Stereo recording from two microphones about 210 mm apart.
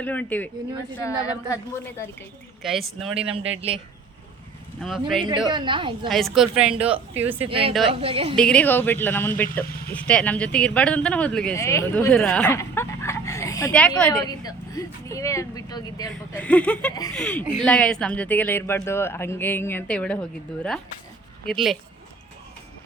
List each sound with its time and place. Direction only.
0.0 s speech: 10° left (ahead or behind)
2.6 s a man's voice: centre (ahead or behind)
3.2 s a woman's voice: 25° right (ahead or behind)
4.8 s a man's voice: centre (ahead or behind)
5.5 s a woman's voice: 20° right (ahead or behind)
6.1 s a man's voice: centre (ahead or behind)
6.9 s a woman's voice: 30° right (ahead or behind)
8.4 s speech: 5° left (ahead or behind)
21.5 s a man's voice: centre (ahead or behind)